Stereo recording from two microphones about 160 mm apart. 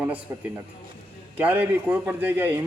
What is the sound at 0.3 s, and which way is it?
A man's voice, 15° right (ahead or behind).